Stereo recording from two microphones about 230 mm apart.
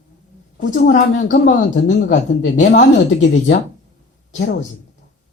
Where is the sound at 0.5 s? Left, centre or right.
Left.